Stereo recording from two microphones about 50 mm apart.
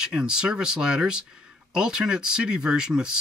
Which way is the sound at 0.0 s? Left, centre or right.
Centre.